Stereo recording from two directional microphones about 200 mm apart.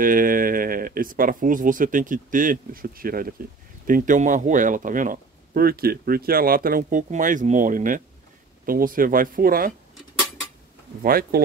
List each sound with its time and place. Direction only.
0.0 s speech: 45° right (ahead or behind)
11.0 s speech: 45° right (ahead or behind)